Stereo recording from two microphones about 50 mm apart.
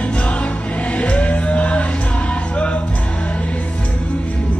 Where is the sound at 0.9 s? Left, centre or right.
Left.